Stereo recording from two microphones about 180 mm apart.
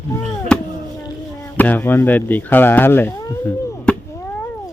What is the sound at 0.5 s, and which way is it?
Chop, 5° left (ahead or behind).